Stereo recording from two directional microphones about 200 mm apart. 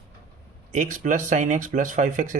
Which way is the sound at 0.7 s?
40° right (ahead or behind).